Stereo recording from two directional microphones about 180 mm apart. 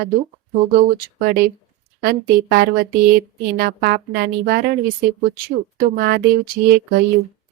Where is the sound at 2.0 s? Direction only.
60° right (ahead or behind).